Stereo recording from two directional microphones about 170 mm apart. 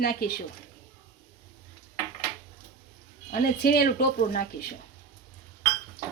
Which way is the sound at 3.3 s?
65° left (ahead or behind).